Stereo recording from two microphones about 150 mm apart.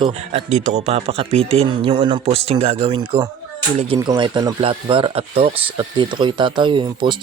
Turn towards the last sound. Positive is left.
turn(degrees=-30)  # may be behind; listen again after turning